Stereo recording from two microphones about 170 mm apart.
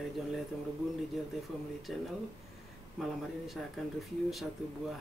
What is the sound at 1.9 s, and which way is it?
Speech, centre (ahead or behind).